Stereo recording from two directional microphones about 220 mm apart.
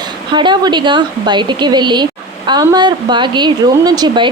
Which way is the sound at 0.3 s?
20° right (ahead or behind).